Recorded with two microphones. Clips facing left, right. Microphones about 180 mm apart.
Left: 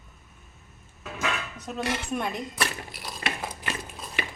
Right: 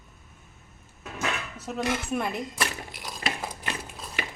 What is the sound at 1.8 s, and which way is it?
Speech, 5° right (ahead or behind).